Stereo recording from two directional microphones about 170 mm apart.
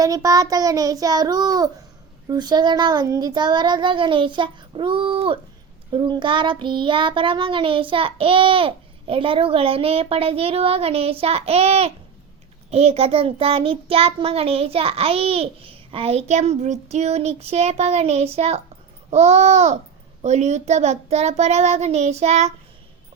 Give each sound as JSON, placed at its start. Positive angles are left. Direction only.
{"t": 0.0, "sound": "a child's voice", "side_deg": -20}
{"t": 5.9, "sound": "child singing", "side_deg": -30}